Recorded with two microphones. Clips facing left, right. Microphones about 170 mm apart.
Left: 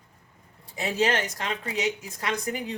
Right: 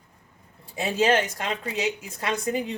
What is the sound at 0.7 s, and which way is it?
Speech, 25° right (ahead or behind).